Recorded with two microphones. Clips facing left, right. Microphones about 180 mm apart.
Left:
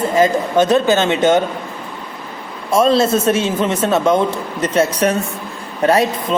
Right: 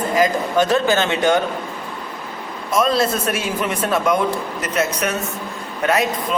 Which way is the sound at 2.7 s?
30° left (ahead or behind).